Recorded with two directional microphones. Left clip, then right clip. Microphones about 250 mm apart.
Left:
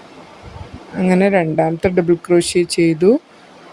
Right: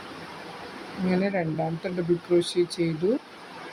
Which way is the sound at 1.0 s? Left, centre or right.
Left.